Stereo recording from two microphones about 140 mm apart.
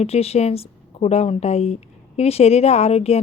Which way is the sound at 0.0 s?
45° left (ahead or behind).